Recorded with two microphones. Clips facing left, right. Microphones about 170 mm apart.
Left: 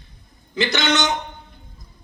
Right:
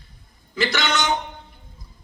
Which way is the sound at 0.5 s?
20° left (ahead or behind).